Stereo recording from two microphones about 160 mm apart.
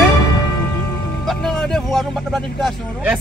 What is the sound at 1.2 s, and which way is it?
Speech, centre (ahead or behind).